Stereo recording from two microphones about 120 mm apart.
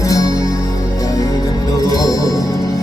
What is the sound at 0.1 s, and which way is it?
Music, 30° left (ahead or behind).